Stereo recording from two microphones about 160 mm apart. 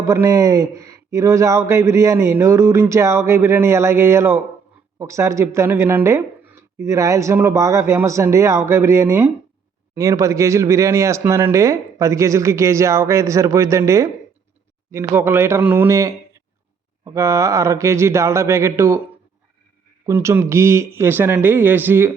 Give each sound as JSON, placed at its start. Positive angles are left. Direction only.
{"t": 0.0, "sound": "speech", "side_deg": -20}
{"t": 20.1, "sound": "speech", "side_deg": -15}